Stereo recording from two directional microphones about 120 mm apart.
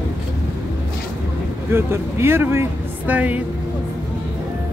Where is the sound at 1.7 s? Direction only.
20° right (ahead or behind).